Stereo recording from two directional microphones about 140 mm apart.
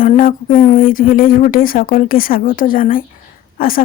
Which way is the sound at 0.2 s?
75° left (ahead or behind).